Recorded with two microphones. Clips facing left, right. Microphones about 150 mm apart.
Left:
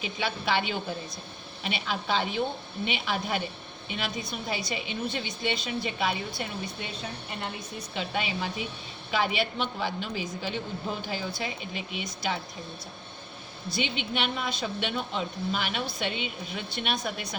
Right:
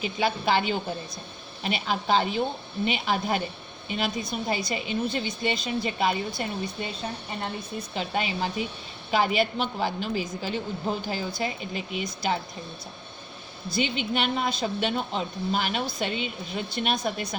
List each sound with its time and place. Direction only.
0.0 s a woman's voice: 45° right (ahead or behind)
7.9 s a woman's voice: 40° right (ahead or behind)
13.7 s a woman's voice: 45° right (ahead or behind)